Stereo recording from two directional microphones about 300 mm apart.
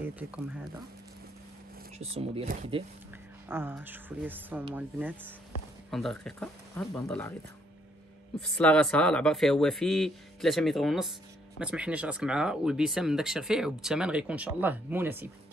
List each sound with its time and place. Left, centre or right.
2.0 s speech: centre
3.4 s speech: centre
8.4 s speech: centre